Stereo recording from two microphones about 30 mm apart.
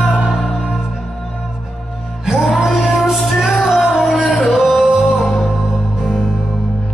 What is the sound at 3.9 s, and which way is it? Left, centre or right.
Music, right.